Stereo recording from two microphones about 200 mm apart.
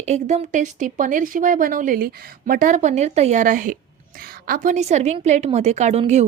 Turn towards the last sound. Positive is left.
turn(degrees=-35)  # may be behind; listen again after turning